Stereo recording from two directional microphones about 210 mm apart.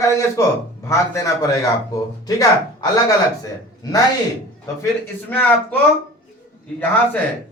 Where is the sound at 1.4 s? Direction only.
15° left (ahead or behind).